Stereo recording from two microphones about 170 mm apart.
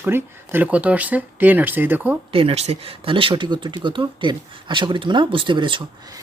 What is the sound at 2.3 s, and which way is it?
Speech, 35° right (ahead or behind).